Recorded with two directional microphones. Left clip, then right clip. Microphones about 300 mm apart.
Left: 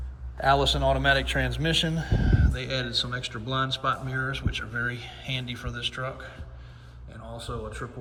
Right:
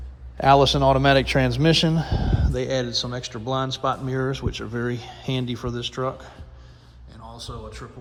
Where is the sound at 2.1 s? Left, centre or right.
Centre.